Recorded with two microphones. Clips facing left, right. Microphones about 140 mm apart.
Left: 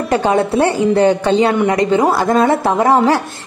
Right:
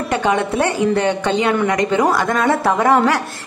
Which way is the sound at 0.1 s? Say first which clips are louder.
Left 4 dB; 35° left (ahead or behind).